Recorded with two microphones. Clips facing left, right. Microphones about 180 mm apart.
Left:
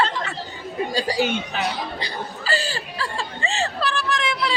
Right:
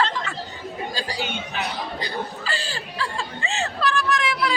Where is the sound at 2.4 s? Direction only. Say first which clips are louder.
Left 5 dB; 40° left (ahead or behind).